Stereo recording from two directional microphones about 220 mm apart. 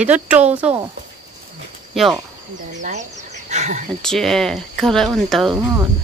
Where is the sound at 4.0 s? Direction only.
Centre (ahead or behind).